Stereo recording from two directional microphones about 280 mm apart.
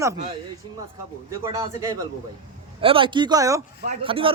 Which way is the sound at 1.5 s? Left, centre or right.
Centre.